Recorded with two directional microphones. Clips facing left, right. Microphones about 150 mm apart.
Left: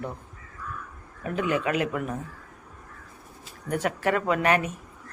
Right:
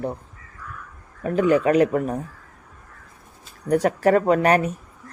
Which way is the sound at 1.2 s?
35° right (ahead or behind).